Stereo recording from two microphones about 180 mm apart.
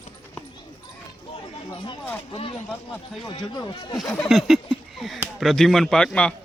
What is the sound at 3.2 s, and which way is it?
Speech, 25° left (ahead or behind).